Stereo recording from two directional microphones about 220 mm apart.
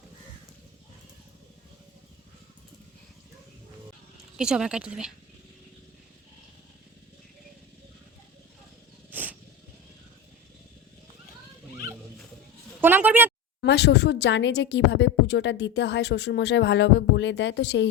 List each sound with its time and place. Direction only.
4.4 s speech: 5° right (ahead or behind)
9.1 s a sound: 10° right (ahead or behind)
12.8 s a woman's voice: 10° right (ahead or behind)
13.6 s a woman's voice: 50° left (ahead or behind)